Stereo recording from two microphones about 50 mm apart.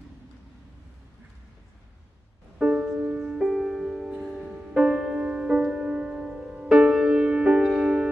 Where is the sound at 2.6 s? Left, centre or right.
Centre.